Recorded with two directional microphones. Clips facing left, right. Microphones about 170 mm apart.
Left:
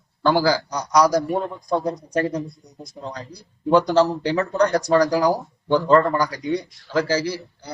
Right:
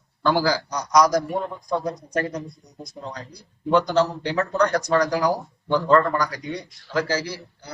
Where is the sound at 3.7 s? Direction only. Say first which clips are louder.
Left 3 dB; 30° left (ahead or behind).